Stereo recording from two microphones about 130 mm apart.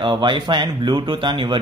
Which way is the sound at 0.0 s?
40° right (ahead or behind).